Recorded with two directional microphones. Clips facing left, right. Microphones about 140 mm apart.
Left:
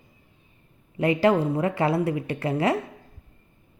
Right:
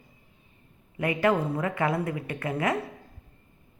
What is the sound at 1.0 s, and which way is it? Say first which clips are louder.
A woman's voice: left 4 dB; 30° left (ahead or behind).